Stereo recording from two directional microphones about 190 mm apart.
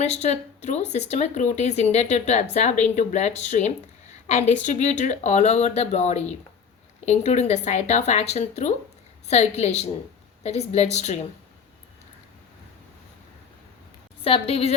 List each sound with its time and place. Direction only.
0.0 s speech: 35° left (ahead or behind)
14.3 s speech: 30° left (ahead or behind)